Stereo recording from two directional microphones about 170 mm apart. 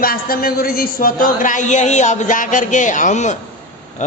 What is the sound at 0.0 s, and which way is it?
Speech, 60° left (ahead or behind).